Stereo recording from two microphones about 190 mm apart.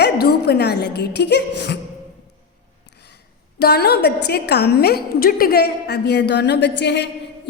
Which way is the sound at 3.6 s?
55° left (ahead or behind).